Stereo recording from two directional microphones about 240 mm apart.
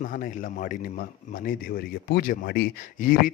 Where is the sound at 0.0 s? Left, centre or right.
Left.